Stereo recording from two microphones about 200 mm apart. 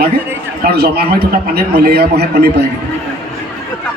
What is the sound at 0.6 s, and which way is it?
A man's voice, 50° right (ahead or behind).